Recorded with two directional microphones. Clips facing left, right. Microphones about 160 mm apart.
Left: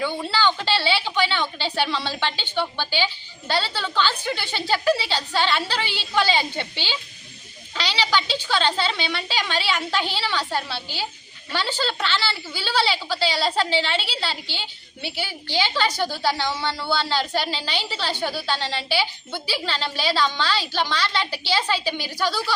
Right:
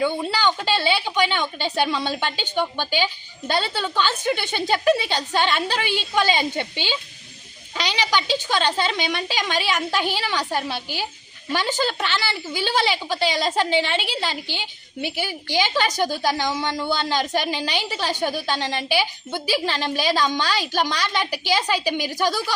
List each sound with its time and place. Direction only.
0.0 s a woman's voice: 15° right (ahead or behind)